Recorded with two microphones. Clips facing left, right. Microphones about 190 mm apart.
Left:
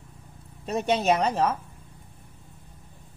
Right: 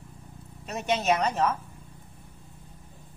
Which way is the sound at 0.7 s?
30° left (ahead or behind).